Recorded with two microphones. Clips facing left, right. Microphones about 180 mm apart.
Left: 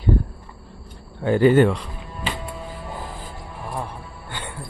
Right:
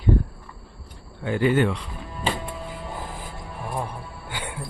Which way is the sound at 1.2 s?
40° left (ahead or behind).